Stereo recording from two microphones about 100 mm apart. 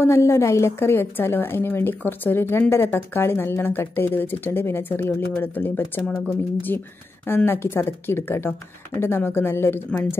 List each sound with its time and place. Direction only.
0.0 s speech: 30° left (ahead or behind)